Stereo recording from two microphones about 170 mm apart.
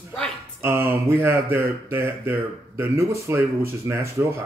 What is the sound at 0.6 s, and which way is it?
Speech, 15° right (ahead or behind).